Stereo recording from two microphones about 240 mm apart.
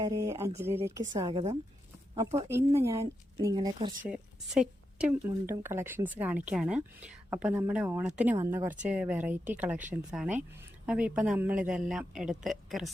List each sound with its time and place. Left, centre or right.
0.0 s speech: centre
2.5 s speech: centre
4.1 s a woman's voice: centre